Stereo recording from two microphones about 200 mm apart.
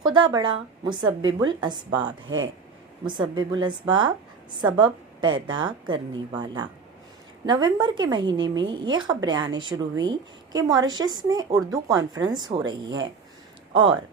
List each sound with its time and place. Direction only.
0.1 s a woman's voice: 20° right (ahead or behind)
2.2 s speech: 75° right (ahead or behind)
3.1 s a woman's voice: 25° right (ahead or behind)